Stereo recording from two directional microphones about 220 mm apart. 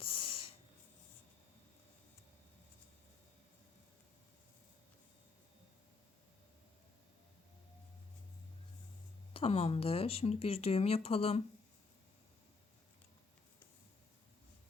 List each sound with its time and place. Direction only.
0.0 s snort: 25° left (ahead or behind)
9.3 s speech: 25° left (ahead or behind)